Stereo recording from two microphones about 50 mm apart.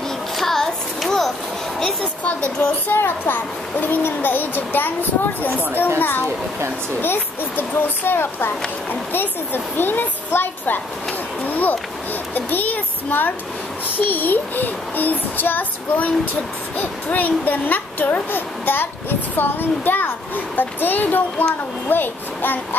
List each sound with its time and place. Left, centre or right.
0.4 s child singing: centre
2.2 s speech: left
11.4 s a sound: left
12.4 s a child's voice: left